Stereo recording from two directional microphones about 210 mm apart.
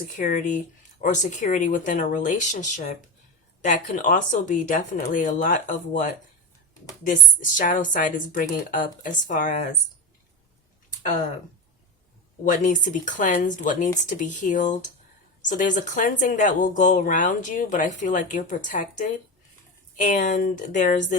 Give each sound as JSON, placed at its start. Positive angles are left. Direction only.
{"t": 0.0, "sound": "speech", "side_deg": 40}
{"t": 12.5, "sound": "speech", "side_deg": 35}